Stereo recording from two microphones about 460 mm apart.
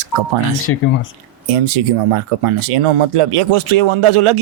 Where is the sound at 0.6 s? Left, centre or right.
Left.